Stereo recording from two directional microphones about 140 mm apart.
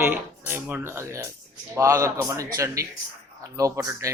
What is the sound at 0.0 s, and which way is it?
A man's voice, 15° right (ahead or behind).